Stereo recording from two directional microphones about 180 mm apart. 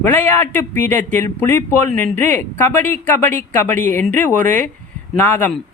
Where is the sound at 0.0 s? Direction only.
10° left (ahead or behind).